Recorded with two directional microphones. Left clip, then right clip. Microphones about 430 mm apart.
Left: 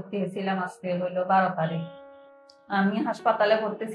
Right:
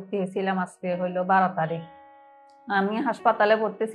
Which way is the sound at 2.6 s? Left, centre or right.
Right.